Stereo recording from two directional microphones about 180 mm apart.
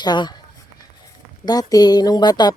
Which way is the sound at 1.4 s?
20° left (ahead or behind).